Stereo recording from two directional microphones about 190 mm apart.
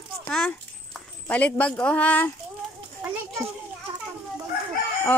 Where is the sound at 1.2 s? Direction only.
5° left (ahead or behind).